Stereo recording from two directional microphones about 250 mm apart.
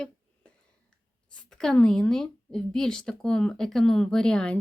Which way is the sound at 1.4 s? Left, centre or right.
Centre.